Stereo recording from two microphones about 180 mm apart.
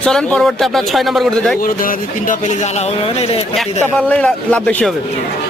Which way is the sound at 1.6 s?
50° left (ahead or behind).